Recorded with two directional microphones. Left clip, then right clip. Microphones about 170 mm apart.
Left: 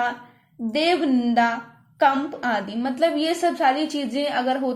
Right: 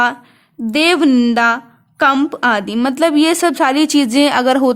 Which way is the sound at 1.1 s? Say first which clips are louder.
Right 8 dB; 60° right (ahead or behind).